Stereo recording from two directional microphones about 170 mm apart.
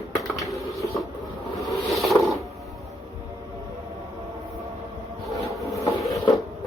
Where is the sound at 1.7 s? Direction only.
Centre (ahead or behind).